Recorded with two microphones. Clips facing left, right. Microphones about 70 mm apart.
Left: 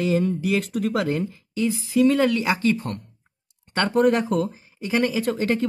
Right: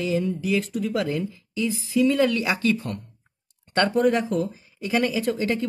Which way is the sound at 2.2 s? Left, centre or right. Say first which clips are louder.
Left 1 dB; left.